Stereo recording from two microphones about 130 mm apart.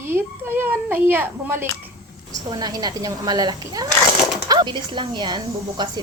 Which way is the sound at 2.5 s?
30° right (ahead or behind).